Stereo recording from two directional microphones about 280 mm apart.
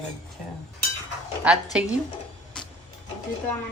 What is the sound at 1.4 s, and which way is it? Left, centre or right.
Speech, centre.